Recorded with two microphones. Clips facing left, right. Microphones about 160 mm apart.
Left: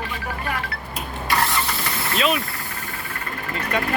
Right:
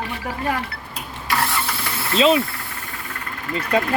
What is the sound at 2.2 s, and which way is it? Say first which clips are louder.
Speech: right 7 dB; 30° right (ahead or behind).